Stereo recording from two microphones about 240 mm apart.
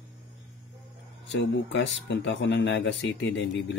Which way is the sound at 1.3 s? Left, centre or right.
Left.